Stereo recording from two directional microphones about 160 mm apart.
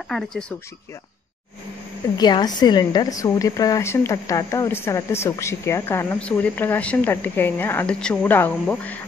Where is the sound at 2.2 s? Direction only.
25° left (ahead or behind).